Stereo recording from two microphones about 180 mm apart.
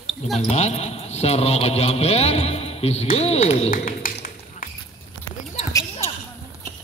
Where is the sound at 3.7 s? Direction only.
50° left (ahead or behind).